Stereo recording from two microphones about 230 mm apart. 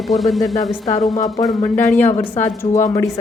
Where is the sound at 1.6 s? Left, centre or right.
Centre.